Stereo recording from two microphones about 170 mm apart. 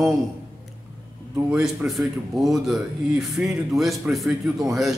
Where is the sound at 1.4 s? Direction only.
5° right (ahead or behind).